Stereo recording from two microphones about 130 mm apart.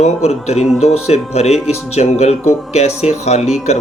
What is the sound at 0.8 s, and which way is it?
Speech, 55° left (ahead or behind).